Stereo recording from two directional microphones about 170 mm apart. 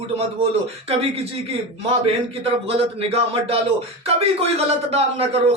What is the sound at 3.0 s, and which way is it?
A man's voice, 35° right (ahead or behind).